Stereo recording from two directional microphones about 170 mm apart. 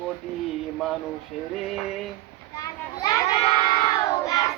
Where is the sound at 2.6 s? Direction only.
20° left (ahead or behind).